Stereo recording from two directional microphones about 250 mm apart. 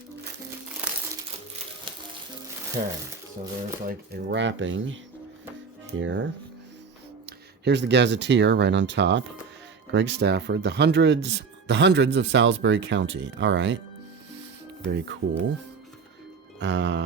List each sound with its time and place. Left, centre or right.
2.8 s speech: right
6.0 s speech: right
7.3 s speech: right
14.8 s speech: right
16.6 s speech: right